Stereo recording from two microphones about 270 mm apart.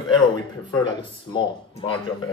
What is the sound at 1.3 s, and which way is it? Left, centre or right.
Speech, centre.